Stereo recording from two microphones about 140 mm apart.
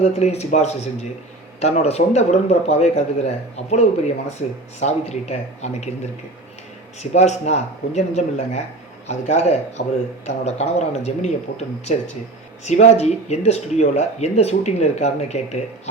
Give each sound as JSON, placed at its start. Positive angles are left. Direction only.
{"t": 0.0, "sound": "speech", "side_deg": 50}
{"t": 7.0, "sound": "speech", "side_deg": 55}